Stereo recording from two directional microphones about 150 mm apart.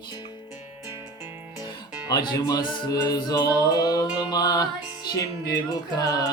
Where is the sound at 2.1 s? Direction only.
25° left (ahead or behind).